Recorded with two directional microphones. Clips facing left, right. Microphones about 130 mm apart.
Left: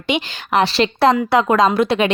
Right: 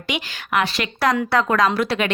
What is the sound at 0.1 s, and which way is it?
Speech, 30° left (ahead or behind).